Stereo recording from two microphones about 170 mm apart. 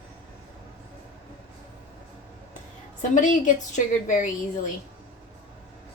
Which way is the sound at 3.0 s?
45° left (ahead or behind).